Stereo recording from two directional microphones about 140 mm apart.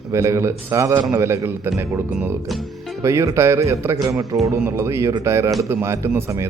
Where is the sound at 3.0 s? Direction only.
20° right (ahead or behind).